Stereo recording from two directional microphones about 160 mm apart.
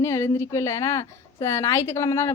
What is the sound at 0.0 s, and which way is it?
A woman's voice, 15° left (ahead or behind).